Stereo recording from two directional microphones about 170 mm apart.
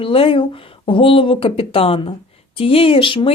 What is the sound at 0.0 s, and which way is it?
Speech, 30° left (ahead or behind).